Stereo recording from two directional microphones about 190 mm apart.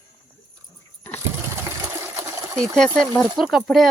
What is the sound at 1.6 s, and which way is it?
Water, 15° right (ahead or behind).